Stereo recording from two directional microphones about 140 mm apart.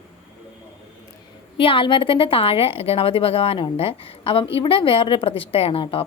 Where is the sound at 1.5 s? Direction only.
40° left (ahead or behind).